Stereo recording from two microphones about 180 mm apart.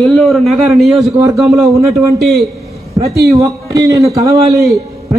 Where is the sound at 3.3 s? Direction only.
15° right (ahead or behind).